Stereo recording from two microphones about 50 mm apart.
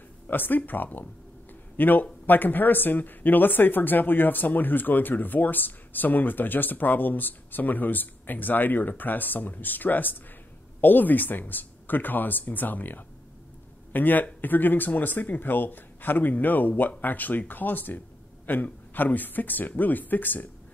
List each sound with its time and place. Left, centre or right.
0.3 s speech: left